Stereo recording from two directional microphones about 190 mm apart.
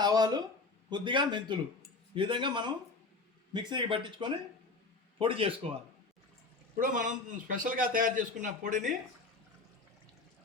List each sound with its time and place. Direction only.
0.0 s a sound: 20° right (ahead or behind)
0.9 s speech: 25° right (ahead or behind)
6.7 s a man's voice: 45° right (ahead or behind)